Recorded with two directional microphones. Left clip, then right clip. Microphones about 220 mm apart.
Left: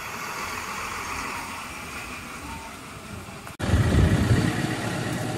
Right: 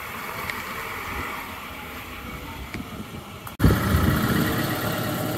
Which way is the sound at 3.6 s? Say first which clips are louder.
Right 3 dB; 45° right (ahead or behind).